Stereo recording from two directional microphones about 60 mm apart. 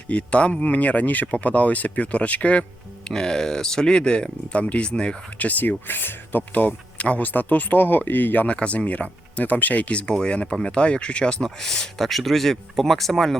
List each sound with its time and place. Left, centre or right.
0.1 s speech: left
3.1 s speech: centre; by 8.4 s left
8.4 s speech: centre